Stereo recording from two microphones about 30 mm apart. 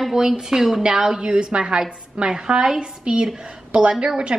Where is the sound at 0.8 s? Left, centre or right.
Right.